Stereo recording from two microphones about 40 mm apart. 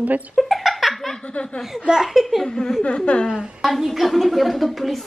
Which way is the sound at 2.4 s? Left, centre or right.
Centre.